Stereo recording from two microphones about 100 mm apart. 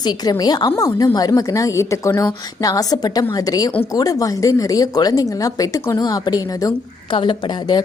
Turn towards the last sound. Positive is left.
turn(degrees=45)  # may be behind; listen again after turning